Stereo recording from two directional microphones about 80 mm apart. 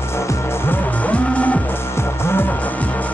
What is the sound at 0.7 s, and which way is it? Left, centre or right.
Music, centre.